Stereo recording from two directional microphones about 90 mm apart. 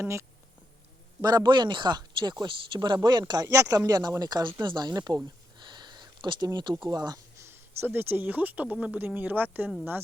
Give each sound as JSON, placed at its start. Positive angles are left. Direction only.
{"t": 0.0, "sound": "speech", "side_deg": -30}
{"t": 1.2, "sound": "speech", "side_deg": -45}
{"t": 3.4, "sound": "speech", "side_deg": -35}
{"t": 7.3, "sound": "speech", "side_deg": -30}